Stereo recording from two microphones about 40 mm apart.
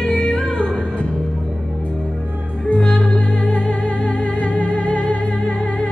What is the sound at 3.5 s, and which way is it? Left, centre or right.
Music, left.